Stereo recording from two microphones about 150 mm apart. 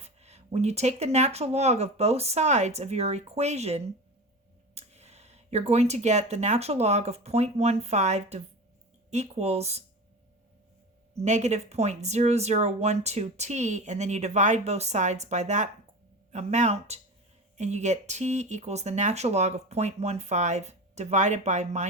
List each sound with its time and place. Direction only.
0.0 s speech: 45° right (ahead or behind)
11.2 s speech: 50° right (ahead or behind)